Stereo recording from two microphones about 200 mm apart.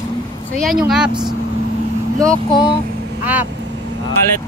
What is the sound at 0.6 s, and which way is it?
Speech, centre (ahead or behind).